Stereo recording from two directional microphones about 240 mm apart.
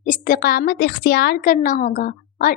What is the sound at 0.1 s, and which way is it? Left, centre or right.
A woman's voice, left.